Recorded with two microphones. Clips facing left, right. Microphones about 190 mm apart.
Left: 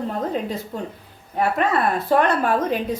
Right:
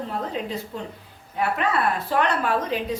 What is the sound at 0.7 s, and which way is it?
Speech, 45° left (ahead or behind).